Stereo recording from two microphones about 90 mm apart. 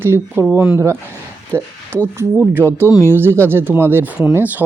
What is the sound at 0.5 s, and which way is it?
Speech, 10° right (ahead or behind).